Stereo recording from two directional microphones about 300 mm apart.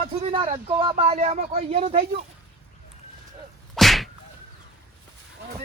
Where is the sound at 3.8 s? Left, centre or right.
Centre.